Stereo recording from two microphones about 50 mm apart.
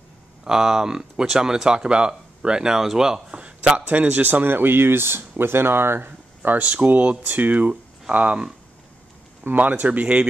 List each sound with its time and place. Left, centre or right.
0.4 s speech: centre
3.9 s speech: right
6.6 s speech: right
9.4 s speech: right